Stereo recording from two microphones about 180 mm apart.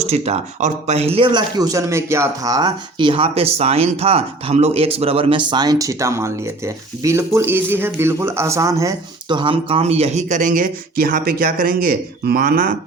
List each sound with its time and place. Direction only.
0.0 s a man's voice: 35° right (ahead or behind); by 12.7 s 55° right (ahead or behind)